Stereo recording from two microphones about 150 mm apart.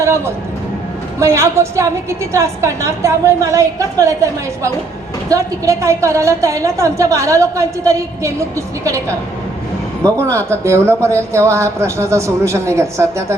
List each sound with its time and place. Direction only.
0.0 s a woman's voice: 20° right (ahead or behind)